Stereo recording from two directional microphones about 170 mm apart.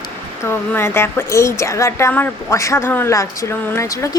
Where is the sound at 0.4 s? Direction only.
15° left (ahead or behind).